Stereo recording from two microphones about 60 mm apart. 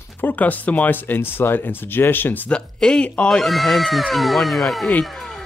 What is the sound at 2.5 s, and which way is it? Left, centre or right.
Speech, centre.